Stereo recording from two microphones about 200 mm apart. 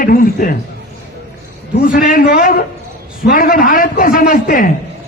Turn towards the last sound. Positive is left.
turn(degrees=45)  # may be behind; listen again after turning